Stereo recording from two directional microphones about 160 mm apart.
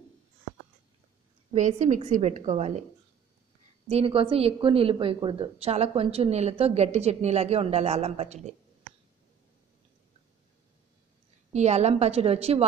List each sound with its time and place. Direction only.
1.5 s a woman's voice: 50° right (ahead or behind)
3.9 s a woman's voice: 35° right (ahead or behind)
11.5 s a woman's voice: 45° right (ahead or behind)